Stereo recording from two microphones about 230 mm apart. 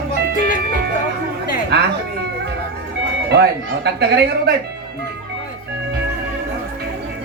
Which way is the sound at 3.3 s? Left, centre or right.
Right.